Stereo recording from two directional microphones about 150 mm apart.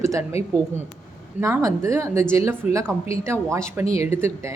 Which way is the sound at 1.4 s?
20° right (ahead or behind).